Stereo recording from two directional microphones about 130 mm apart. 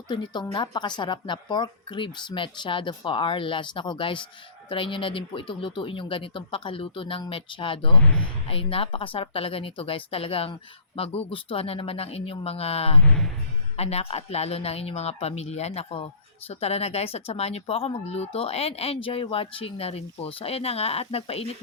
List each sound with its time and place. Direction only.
0.5 s speech: 35° left (ahead or behind)
8.0 s speech: 10° left (ahead or behind)
8.4 s speech: 45° left (ahead or behind)
13.1 s speech: 5° left (ahead or behind)
13.7 s speech: 50° left (ahead or behind)